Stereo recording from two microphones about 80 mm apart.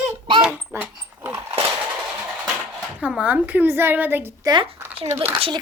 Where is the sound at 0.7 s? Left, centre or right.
Right.